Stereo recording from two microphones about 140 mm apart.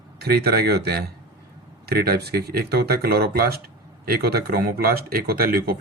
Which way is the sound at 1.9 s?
90° right.